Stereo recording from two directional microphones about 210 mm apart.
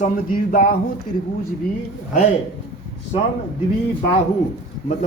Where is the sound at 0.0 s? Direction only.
40° left (ahead or behind).